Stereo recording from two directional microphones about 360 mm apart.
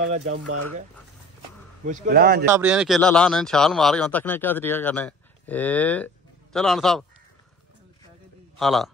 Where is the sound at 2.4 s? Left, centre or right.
Centre.